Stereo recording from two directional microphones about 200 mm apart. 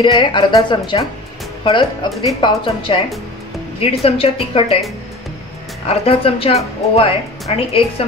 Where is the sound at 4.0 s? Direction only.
30° left (ahead or behind).